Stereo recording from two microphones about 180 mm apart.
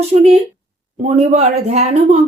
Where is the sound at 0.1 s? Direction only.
35° right (ahead or behind).